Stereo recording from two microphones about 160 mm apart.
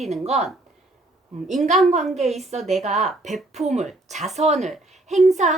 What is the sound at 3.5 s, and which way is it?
A woman's voice, 45° right (ahead or behind).